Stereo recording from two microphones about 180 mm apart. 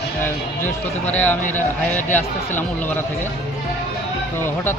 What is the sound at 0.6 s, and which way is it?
A man's voice, 10° left (ahead or behind).